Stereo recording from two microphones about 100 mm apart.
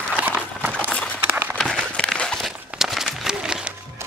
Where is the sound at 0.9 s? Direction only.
15° left (ahead or behind); by 3.7 s 5° right (ahead or behind).